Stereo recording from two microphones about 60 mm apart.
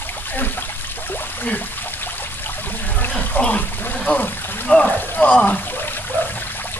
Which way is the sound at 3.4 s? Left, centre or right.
Centre.